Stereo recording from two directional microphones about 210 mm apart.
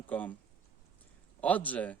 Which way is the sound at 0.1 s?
5° left (ahead or behind).